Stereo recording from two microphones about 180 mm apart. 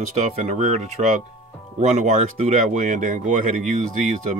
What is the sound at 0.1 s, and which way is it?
Speech, 40° right (ahead or behind).